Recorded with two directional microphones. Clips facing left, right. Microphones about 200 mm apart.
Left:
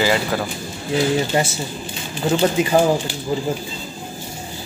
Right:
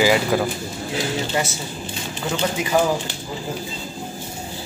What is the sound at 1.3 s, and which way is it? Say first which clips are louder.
Speech: left 1 dB; 30° left (ahead or behind).